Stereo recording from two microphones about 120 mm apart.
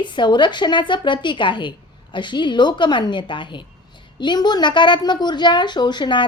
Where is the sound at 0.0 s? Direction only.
40° left (ahead or behind).